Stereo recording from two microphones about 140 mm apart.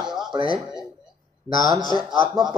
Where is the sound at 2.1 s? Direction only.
30° right (ahead or behind).